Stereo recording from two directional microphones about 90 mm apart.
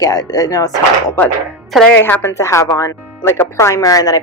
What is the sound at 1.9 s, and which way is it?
A woman's voice, 20° left (ahead or behind).